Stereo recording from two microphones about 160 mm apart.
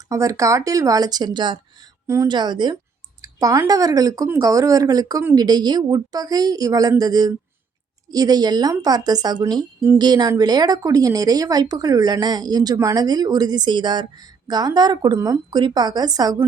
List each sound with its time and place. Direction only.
0.1 s speech: 20° right (ahead or behind)